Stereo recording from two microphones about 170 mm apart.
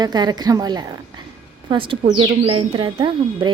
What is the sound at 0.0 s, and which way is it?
Speech, 25° right (ahead or behind).